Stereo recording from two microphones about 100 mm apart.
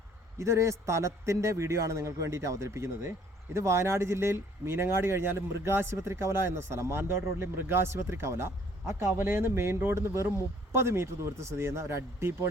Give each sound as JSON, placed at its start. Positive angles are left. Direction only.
{"t": 0.3, "sound": "speech", "side_deg": -30}